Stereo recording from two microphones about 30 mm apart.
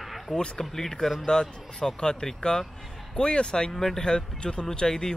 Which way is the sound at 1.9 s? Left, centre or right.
Left.